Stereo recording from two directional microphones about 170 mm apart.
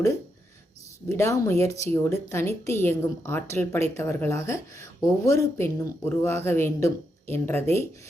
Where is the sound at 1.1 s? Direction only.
15° left (ahead or behind).